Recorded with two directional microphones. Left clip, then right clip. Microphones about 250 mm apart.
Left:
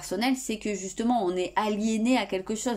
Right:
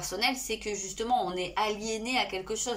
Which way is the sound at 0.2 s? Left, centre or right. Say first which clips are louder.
Right 1 dB; left.